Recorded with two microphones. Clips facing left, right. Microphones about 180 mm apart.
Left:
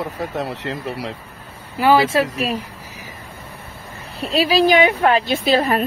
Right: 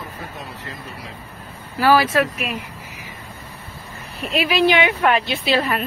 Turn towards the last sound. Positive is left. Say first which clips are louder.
# left 4 dB
turn(degrees=40)  # may be behind; listen again after turning